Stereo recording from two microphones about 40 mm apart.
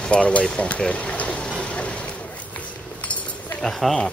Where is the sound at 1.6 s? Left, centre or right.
Left.